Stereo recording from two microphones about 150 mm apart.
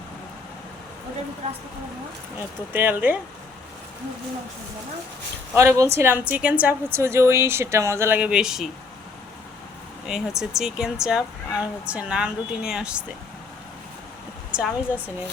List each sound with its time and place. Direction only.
2.7 s a woman's voice: 10° right (ahead or behind)
5.5 s a woman's voice: 20° right (ahead or behind); by 8.7 s 5° right (ahead or behind)
10.1 s speech: 5° right (ahead or behind)
14.5 s a woman's voice: 10° right (ahead or behind)